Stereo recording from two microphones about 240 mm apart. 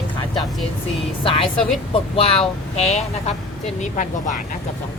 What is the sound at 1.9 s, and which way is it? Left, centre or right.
Speech, left.